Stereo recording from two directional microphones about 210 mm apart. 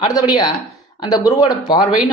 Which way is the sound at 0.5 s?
20° left (ahead or behind).